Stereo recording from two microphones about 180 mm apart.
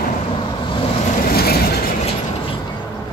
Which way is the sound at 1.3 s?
60° left (ahead or behind).